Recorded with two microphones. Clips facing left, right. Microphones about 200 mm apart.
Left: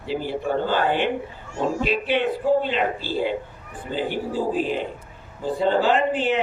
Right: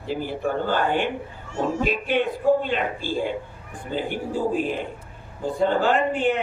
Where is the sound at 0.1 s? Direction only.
50° right (ahead or behind).